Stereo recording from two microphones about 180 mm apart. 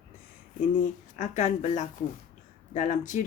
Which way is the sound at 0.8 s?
40° left (ahead or behind).